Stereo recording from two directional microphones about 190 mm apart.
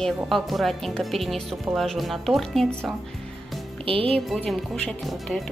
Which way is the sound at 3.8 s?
30° right (ahead or behind).